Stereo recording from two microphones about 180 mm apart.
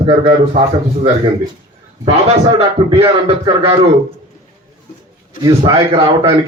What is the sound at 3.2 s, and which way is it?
Speech, 30° right (ahead or behind).